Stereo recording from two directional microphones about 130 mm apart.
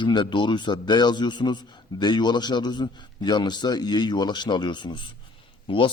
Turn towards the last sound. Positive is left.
turn(degrees=40)  # may be behind; listen again after turning